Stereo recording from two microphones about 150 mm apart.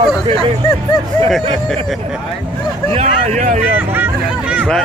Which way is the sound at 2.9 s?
45° right (ahead or behind).